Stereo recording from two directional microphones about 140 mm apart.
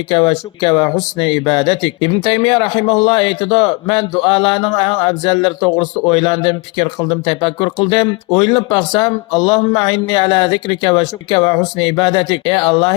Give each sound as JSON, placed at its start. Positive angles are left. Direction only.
{"t": 0.1, "sound": "speech", "side_deg": 35}